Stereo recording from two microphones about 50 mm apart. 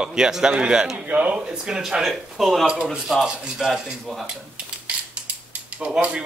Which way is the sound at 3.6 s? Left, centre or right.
Centre.